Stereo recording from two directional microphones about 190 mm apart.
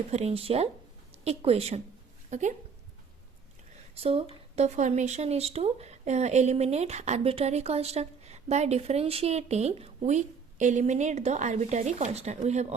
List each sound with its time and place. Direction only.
0.1 s speech: 35° right (ahead or behind)
3.9 s speech: 30° right (ahead or behind)